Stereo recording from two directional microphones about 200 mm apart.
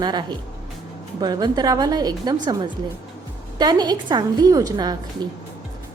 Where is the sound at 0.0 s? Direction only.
20° right (ahead or behind).